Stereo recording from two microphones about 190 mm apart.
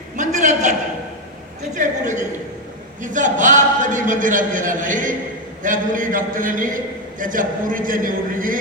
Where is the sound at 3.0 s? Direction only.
40° right (ahead or behind).